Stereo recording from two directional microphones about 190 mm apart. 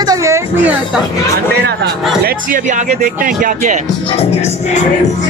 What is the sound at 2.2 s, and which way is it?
Speech, 45° right (ahead or behind).